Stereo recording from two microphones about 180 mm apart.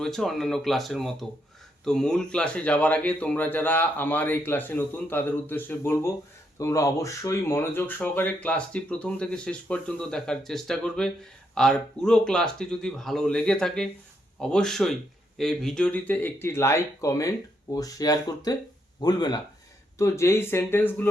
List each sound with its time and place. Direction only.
0.0 s speech: centre (ahead or behind)